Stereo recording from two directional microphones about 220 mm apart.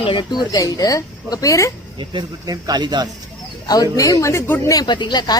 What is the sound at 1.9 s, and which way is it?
Speech, 20° right (ahead or behind).